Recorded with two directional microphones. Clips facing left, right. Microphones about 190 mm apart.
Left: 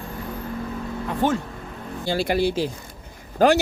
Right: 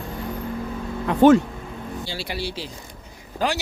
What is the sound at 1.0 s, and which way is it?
Speech, 75° right (ahead or behind).